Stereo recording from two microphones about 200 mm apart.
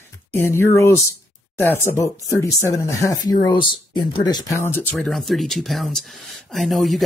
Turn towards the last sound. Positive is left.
turn(degrees=0)  # may be behind; listen again after turning